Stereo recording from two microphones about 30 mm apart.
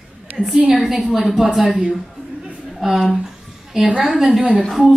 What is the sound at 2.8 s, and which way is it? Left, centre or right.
Speech, centre.